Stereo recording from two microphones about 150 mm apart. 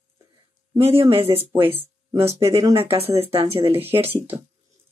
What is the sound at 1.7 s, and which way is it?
Speech, 15° right (ahead or behind).